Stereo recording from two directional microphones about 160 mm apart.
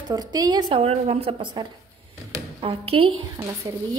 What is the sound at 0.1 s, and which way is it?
A woman's voice, 25° right (ahead or behind).